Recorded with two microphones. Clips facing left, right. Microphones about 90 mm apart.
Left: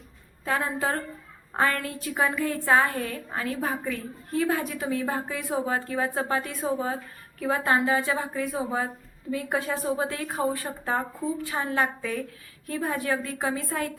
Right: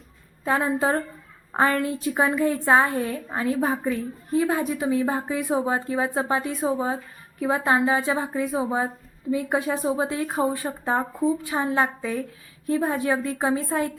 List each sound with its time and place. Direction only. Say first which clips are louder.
0.4 s a woman's voice: right 5 dB; 20° right (ahead or behind)